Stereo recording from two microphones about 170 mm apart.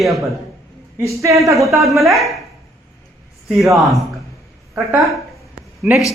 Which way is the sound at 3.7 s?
Centre (ahead or behind).